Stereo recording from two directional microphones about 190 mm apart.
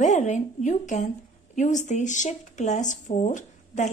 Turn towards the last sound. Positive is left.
turn(degrees=40)  # may be behind; listen again after turning